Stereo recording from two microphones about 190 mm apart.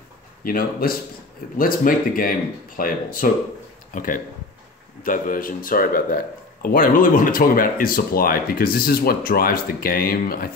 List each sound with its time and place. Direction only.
0.4 s speech: 50° left (ahead or behind)